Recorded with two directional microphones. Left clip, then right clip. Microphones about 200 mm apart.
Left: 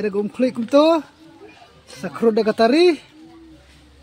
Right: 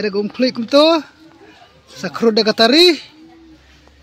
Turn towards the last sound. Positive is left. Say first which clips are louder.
# right 4 dB
turn(degrees=-10)  # may be behind; listen again after turning